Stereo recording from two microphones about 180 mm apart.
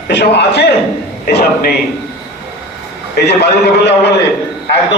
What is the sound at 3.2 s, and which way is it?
A man's voice, 65° left (ahead or behind).